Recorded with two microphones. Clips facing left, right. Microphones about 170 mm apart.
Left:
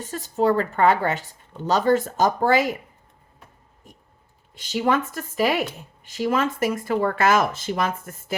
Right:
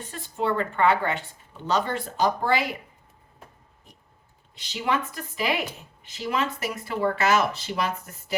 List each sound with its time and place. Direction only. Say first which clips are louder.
0.0 s speech: left 7 dB; 40° left (ahead or behind)
4.5 s speech: left 5 dB; 45° left (ahead or behind)